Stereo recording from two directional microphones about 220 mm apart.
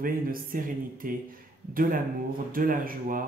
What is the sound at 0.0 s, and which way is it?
Speech, 40° right (ahead or behind).